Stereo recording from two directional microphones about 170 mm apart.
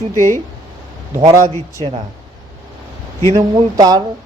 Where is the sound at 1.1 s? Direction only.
20° right (ahead or behind).